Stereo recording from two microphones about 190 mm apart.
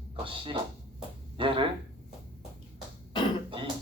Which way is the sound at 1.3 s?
30° right (ahead or behind).